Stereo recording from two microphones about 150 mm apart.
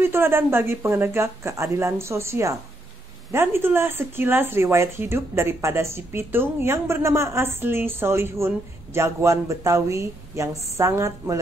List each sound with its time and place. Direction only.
0.0 s speech: 15° right (ahead or behind)